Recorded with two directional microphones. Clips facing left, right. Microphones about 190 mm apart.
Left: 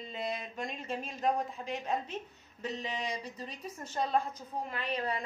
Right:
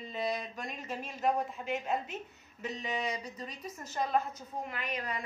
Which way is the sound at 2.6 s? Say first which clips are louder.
Right 1 dB; 30° left (ahead or behind).